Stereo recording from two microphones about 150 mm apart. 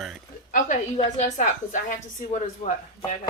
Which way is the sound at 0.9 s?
50° left (ahead or behind).